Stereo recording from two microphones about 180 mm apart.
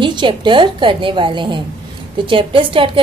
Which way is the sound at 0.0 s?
25° right (ahead or behind).